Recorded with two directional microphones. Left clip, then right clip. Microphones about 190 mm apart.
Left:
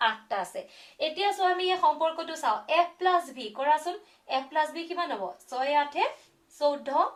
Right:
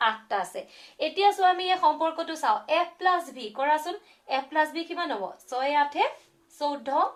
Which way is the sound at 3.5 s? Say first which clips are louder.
Right 1 dB; 30° right (ahead or behind).